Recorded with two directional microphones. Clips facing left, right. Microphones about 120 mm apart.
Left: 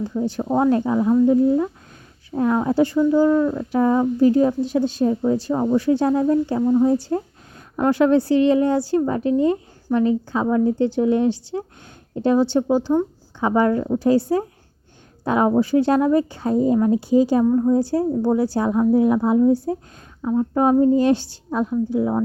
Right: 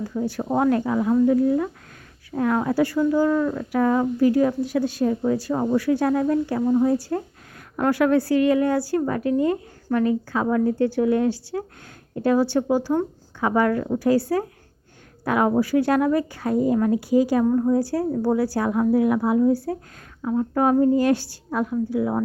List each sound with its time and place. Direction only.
0.1 s a woman's voice: 15° left (ahead or behind)
6.6 s a woman's voice: centre (ahead or behind)
6.8 s a woman's voice: 20° left (ahead or behind)
20.2 s speech: 10° left (ahead or behind)
20.6 s a woman's voice: 25° left (ahead or behind)